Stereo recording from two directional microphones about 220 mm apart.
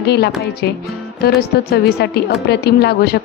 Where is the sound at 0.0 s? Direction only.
50° left (ahead or behind).